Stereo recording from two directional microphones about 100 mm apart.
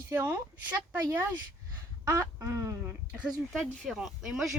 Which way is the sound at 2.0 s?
30° right (ahead or behind).